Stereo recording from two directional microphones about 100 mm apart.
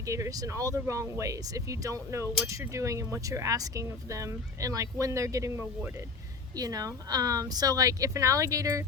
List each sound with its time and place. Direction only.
0.0 s speech: 35° right (ahead or behind)
6.6 s speech: 40° right (ahead or behind)